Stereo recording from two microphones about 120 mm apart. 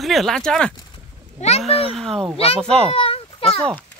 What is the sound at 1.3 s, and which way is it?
Speech, 65° left (ahead or behind).